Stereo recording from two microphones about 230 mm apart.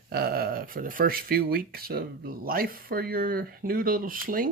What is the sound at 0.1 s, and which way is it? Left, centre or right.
Speech, right.